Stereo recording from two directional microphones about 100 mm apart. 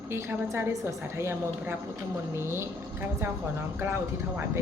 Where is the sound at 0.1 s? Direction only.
25° right (ahead or behind).